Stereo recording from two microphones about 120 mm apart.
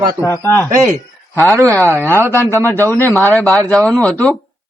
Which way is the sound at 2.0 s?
25° left (ahead or behind).